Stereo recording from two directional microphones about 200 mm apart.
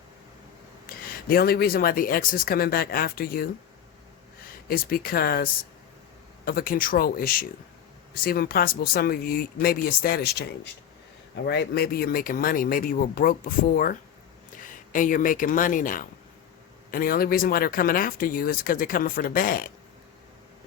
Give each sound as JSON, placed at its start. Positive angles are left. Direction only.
{"t": 0.9, "sound": "speech", "side_deg": 50}